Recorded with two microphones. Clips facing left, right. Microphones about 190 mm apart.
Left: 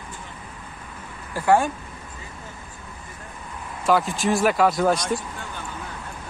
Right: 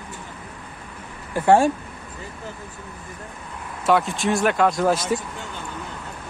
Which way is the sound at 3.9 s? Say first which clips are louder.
Right 1 dB; centre (ahead or behind).